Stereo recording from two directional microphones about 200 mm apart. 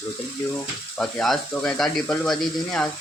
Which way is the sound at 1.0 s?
5° left (ahead or behind).